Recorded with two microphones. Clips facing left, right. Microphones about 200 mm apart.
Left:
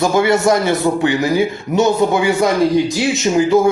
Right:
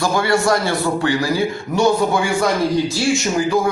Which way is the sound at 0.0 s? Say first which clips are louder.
Left 4 dB; 20° left (ahead or behind).